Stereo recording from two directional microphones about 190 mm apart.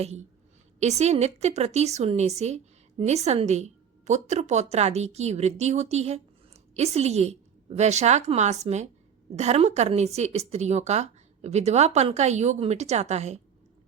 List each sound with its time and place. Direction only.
0.8 s a woman's voice: 35° right (ahead or behind)